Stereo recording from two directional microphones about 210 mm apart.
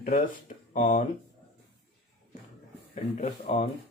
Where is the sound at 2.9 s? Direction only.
30° left (ahead or behind).